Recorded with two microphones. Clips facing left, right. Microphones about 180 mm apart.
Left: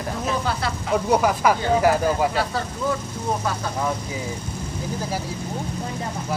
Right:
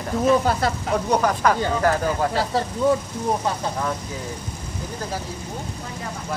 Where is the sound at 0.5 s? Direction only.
45° right (ahead or behind).